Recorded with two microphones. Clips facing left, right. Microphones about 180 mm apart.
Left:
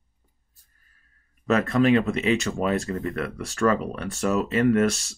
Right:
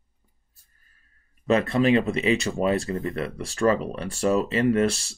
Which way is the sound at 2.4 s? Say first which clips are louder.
Right 1 dB; 30° right (ahead or behind).